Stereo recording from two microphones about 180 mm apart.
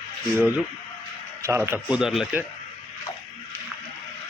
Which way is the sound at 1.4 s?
15° right (ahead or behind).